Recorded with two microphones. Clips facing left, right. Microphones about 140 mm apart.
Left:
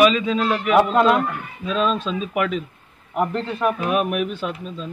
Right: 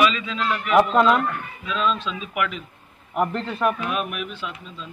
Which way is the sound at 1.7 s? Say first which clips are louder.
Left 3 dB; 40° left (ahead or behind).